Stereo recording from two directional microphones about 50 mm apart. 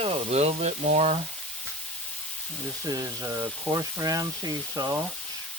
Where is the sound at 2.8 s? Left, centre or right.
Right.